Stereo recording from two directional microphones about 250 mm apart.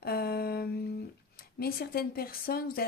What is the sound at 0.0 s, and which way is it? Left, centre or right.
Speech, left.